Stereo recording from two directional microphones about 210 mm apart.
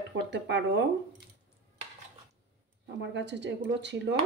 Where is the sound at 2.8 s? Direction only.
55° right (ahead or behind).